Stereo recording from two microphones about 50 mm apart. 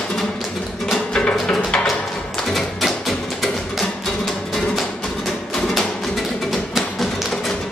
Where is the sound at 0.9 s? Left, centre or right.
Centre.